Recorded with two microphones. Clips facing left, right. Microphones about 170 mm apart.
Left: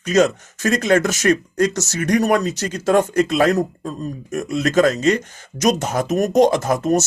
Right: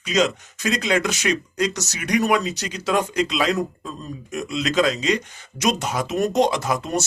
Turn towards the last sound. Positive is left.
turn(degrees=45)  # may be behind; listen again after turning